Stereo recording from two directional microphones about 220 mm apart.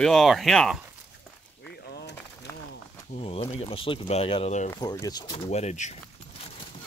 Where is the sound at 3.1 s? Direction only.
25° left (ahead or behind).